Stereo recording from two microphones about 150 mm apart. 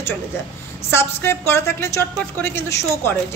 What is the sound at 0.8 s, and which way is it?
A woman's voice, 15° left (ahead or behind).